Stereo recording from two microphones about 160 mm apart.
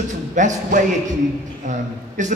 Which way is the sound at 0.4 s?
50° right (ahead or behind).